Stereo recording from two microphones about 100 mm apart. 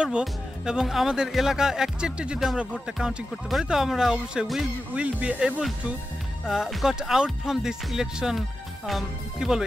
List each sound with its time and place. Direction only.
0.0 s speech: 5° right (ahead or behind)